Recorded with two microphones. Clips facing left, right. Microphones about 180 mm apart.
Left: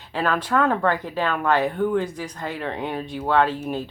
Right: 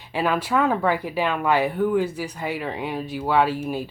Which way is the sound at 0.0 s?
10° right (ahead or behind).